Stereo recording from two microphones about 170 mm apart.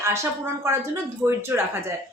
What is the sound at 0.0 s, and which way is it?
Speech, 15° right (ahead or behind).